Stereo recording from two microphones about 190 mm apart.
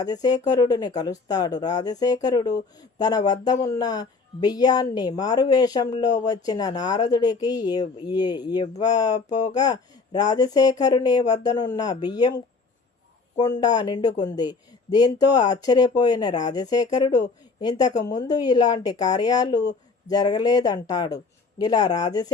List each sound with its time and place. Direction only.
0.0 s speech: 20° left (ahead or behind)
13.6 s speech: 20° left (ahead or behind)